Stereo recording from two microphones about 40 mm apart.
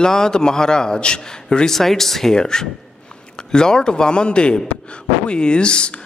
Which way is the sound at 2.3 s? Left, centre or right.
Centre.